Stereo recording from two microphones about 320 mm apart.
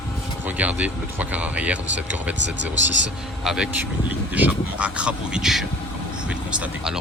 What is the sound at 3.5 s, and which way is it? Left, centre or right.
Speech, centre.